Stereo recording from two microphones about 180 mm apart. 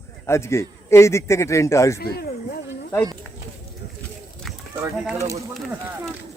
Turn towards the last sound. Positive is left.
turn(degrees=-15)  # may be behind; listen again after turning